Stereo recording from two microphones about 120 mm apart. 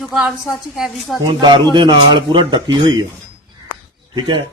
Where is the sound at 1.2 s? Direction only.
40° right (ahead or behind).